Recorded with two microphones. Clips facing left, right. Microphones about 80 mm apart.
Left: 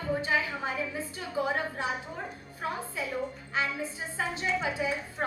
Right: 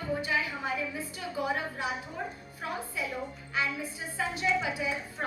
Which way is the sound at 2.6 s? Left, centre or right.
Left.